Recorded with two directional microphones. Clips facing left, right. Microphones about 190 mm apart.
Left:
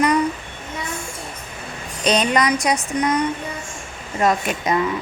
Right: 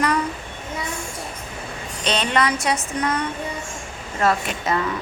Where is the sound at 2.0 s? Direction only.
15° left (ahead or behind).